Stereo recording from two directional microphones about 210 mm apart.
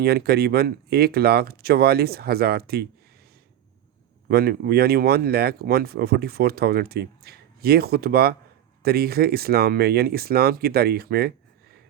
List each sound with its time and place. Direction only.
0.0 s speech: 50° right (ahead or behind)
4.3 s speech: 45° right (ahead or behind)